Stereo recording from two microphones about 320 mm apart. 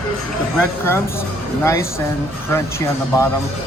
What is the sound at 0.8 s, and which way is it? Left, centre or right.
Speech, centre.